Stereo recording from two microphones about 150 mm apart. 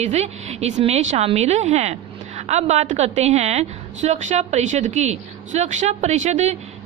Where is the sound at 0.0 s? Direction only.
45° right (ahead or behind).